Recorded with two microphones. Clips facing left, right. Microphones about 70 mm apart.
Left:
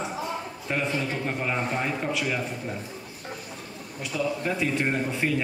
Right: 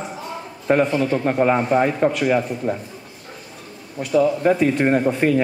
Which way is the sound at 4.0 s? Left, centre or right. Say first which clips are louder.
Right 11 dB; right.